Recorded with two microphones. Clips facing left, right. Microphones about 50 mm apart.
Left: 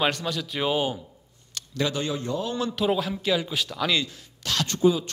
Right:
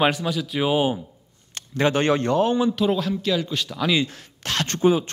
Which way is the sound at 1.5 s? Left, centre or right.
Right.